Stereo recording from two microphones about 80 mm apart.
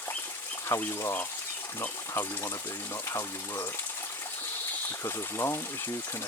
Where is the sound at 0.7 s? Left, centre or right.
Left.